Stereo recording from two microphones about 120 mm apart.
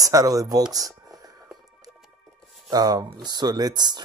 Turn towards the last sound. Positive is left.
turn(degrees=-35)  # may be behind; listen again after turning